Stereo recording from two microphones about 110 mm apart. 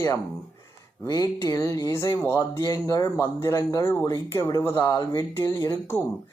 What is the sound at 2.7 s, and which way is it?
Speech, 30° left (ahead or behind).